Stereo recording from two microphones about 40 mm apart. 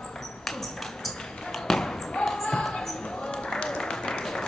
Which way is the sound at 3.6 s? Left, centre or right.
Centre.